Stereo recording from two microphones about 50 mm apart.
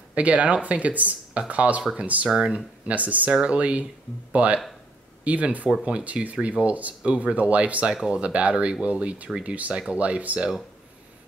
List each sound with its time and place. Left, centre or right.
0.1 s speech: right
2.2 s speech: centre
2.5 s speech: right